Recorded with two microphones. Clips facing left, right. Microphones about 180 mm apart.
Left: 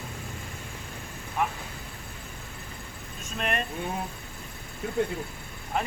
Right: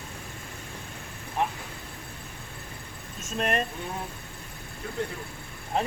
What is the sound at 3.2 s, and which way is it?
Speech, 40° right (ahead or behind).